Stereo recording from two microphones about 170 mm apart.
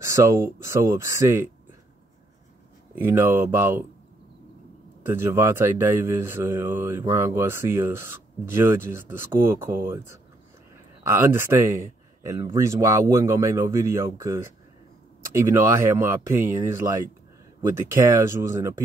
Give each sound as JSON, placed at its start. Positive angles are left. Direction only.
{"t": 0.0, "sound": "speech", "side_deg": -20}
{"t": 3.0, "sound": "speech", "side_deg": -15}
{"t": 5.0, "sound": "speech", "side_deg": -15}